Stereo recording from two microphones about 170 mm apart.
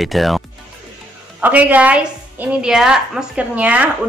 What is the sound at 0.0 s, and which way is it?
Speech, centre (ahead or behind).